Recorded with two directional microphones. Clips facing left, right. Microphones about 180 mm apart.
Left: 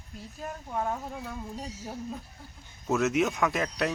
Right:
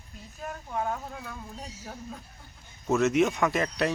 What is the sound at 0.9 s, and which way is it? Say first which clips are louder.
Speech: left 1 dB; 10° left (ahead or behind).